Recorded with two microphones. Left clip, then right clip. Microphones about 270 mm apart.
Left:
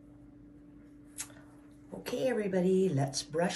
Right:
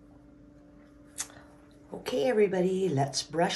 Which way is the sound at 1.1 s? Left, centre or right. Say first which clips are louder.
Right 6 dB; right.